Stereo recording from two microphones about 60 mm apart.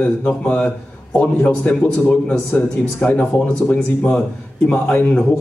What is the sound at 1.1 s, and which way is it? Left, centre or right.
A man's voice, left.